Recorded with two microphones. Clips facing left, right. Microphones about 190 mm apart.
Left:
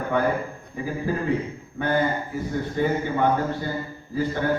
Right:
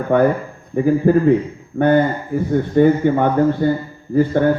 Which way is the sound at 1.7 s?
65° right (ahead or behind).